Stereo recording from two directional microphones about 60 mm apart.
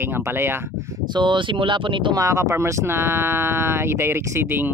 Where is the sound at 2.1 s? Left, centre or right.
Right.